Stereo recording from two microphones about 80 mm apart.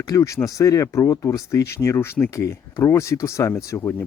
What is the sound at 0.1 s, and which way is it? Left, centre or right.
Speech, left.